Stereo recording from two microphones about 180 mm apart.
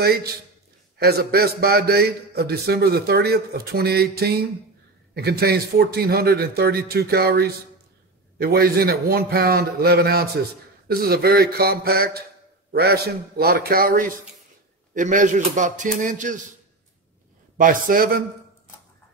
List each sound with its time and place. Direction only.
0.0 s a man's voice: 60° right (ahead or behind)
17.6 s a man's voice: 50° right (ahead or behind)